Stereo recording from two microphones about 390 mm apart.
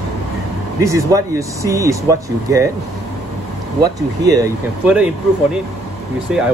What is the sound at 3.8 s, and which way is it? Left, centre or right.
Speech, centre.